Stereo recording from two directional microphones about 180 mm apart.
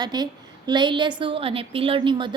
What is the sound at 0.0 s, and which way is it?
A woman's voice, 25° right (ahead or behind).